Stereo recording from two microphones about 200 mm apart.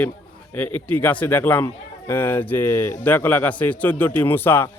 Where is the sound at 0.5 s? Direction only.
10° left (ahead or behind).